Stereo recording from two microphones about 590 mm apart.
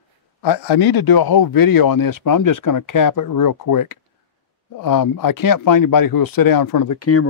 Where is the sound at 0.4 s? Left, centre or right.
Left.